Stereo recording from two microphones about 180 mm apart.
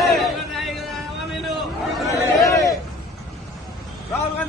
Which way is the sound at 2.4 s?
15° left (ahead or behind).